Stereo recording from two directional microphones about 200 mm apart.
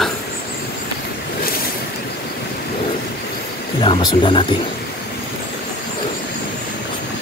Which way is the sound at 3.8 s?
25° left (ahead or behind).